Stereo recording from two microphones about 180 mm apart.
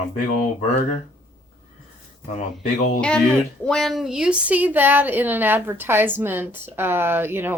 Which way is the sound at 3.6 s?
5° left (ahead or behind).